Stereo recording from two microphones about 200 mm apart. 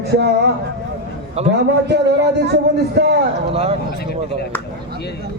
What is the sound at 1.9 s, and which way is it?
A man's voice, 60° right (ahead or behind).